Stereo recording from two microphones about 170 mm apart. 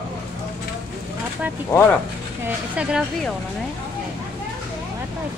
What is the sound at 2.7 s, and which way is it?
Speech, 5° right (ahead or behind).